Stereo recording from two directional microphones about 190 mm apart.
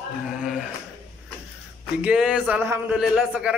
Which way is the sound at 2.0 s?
5° right (ahead or behind).